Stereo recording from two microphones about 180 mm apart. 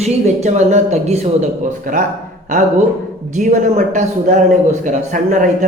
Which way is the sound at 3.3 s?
45° right (ahead or behind).